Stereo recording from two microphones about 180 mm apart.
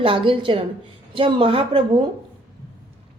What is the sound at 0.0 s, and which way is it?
Speech, 30° right (ahead or behind).